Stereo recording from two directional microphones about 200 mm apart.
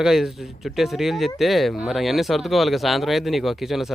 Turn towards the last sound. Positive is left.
turn(degrees=0)  # may be behind; listen again after turning